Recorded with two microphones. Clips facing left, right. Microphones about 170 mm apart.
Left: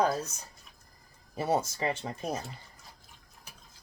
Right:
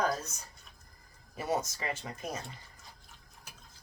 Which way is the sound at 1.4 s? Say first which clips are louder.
Left 4 dB; 30° left (ahead or behind).